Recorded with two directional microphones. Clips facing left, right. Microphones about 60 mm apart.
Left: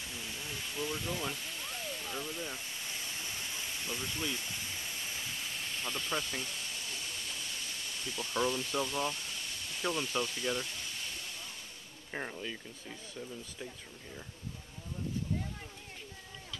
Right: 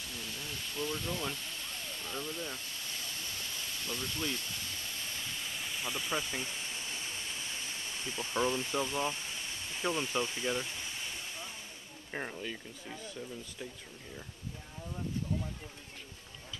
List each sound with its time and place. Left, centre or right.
0.0 s a sound: centre
6.4 s pink noise: right
12.1 s speech: centre